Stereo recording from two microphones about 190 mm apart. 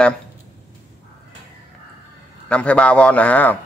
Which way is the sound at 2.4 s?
5° left (ahead or behind).